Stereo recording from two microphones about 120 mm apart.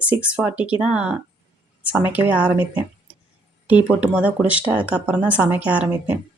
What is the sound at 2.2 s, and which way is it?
Speech, 10° right (ahead or behind).